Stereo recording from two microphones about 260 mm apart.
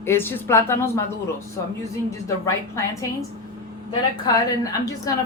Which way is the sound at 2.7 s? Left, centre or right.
Centre.